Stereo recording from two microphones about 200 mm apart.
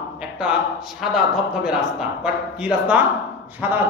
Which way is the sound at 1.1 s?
Centre (ahead or behind).